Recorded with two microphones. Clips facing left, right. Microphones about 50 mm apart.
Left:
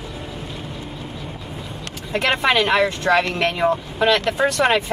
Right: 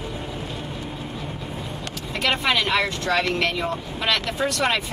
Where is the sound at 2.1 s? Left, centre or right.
Left.